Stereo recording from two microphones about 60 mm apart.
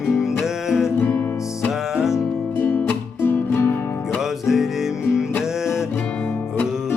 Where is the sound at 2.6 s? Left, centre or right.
Left.